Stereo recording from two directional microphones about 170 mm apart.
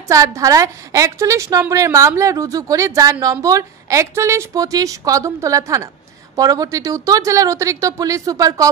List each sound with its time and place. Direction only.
0.1 s a woman's voice: 20° right (ahead or behind)